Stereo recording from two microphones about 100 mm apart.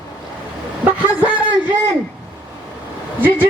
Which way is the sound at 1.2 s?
15° right (ahead or behind).